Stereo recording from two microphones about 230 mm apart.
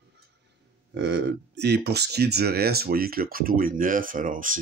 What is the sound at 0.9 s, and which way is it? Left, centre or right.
Speech, right.